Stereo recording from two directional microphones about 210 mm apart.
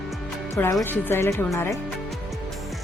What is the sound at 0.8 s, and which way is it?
Speech, 10° left (ahead or behind).